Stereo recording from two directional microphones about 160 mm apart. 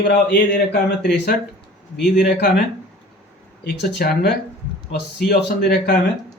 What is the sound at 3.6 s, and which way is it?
Speech, 90° left.